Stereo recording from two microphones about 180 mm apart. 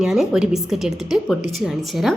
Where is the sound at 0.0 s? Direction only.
5° right (ahead or behind).